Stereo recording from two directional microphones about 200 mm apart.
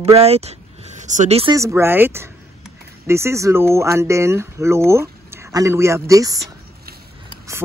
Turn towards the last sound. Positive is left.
turn(degrees=-15)  # may be behind; listen again after turning